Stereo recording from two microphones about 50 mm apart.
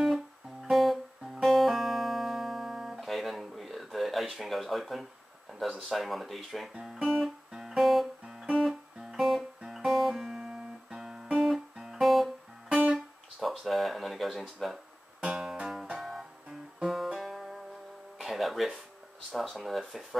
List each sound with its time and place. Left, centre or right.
0.0 s music: centre
5.8 s speech: centre
6.7 s speech: centre
7.1 s guitar: centre
8.5 s music: centre
11.0 s guitar: centre
12.6 s guitar: centre
12.9 s music: centre
14.6 s speech: centre
15.2 s music: centre
19.4 s speech: centre